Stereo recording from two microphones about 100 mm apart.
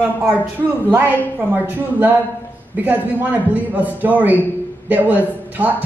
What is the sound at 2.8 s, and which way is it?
A man's voice, 15° right (ahead or behind).